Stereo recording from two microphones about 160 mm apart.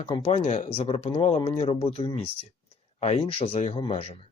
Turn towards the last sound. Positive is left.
turn(degrees=40)  # may be behind; listen again after turning